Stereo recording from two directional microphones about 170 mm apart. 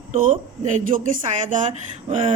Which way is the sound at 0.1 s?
50° right (ahead or behind).